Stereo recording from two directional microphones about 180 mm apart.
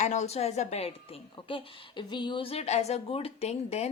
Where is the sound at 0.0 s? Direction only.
40° left (ahead or behind).